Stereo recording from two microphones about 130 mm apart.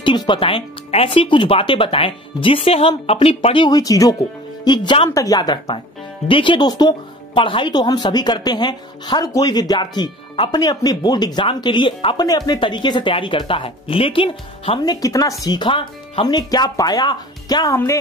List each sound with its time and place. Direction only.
0.0 s speech: 35° left (ahead or behind)
14.8 s speech: 30° left (ahead or behind)